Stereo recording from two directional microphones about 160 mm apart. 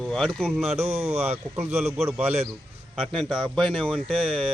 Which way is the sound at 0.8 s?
40° right (ahead or behind).